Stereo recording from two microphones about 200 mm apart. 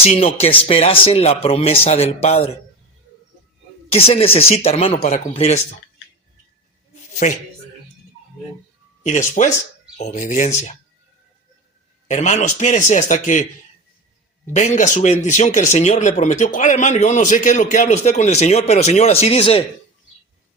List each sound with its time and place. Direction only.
0.0 s speech: 30° left (ahead or behind)
3.9 s speech: 30° left (ahead or behind)
6.9 s a sound: 35° left (ahead or behind)
9.0 s speech: 35° left (ahead or behind)
12.0 s speech: 35° left (ahead or behind)
14.5 s speech: 35° left (ahead or behind)